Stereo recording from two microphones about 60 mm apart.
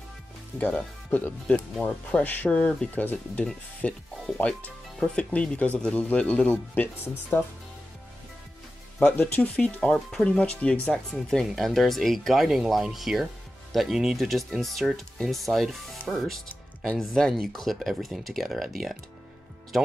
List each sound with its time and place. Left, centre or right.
1.1 s speech: left
1.8 s speech: centre; by 7.4 s left
9.0 s speech: left
9.9 s speech: centre